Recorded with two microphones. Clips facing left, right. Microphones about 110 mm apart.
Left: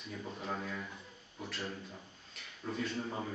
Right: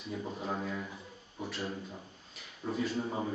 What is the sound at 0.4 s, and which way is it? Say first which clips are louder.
Speech: right 2 dB; 10° right (ahead or behind).